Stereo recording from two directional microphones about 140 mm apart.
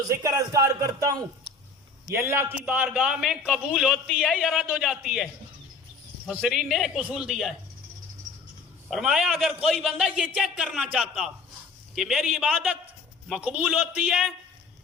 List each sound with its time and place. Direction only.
0.1 s a man's voice: 25° right (ahead or behind)
2.1 s a man's voice: 20° right (ahead or behind); by 5.3 s centre (ahead or behind)
6.4 s a man's voice: 5° right (ahead or behind)
8.9 s a man's voice: 5° right (ahead or behind)